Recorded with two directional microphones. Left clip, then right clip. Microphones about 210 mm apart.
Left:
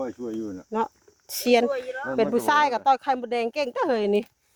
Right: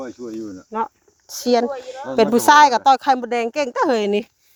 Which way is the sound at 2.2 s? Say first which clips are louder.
Right 10 dB; 45° right (ahead or behind).